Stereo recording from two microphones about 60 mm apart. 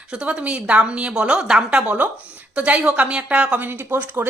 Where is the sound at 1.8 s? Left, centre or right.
Right.